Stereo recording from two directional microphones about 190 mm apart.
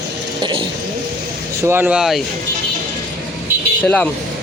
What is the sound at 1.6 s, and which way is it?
Speech, 10° right (ahead or behind).